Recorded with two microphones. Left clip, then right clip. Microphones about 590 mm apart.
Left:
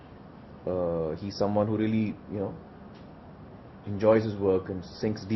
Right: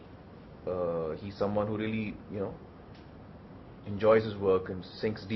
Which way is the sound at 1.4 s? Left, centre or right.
Left.